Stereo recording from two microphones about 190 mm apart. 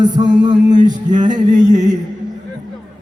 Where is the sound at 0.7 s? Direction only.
40° right (ahead or behind).